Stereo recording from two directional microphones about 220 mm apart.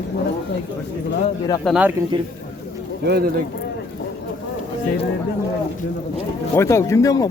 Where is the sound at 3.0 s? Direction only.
45° right (ahead or behind).